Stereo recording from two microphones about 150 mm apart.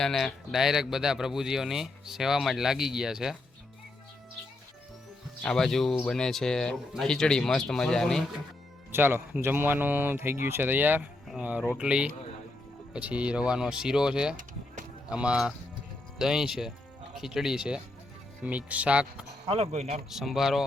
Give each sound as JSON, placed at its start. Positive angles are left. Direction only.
{"t": 0.0, "sound": "speech", "side_deg": 5}
{"t": 5.4, "sound": "speech", "side_deg": 5}
{"t": 8.9, "sound": "speech", "side_deg": -15}
{"t": 19.5, "sound": "speech", "side_deg": -45}
{"t": 20.1, "sound": "speech", "side_deg": 0}